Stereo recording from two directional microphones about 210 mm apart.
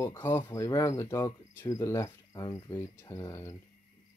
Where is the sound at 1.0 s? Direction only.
15° left (ahead or behind).